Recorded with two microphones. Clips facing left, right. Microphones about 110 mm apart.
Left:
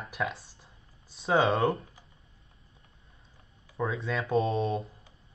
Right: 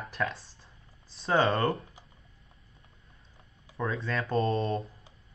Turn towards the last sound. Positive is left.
turn(degrees=0)  # may be behind; listen again after turning